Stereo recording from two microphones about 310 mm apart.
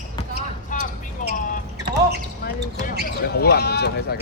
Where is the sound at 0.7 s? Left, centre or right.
Left.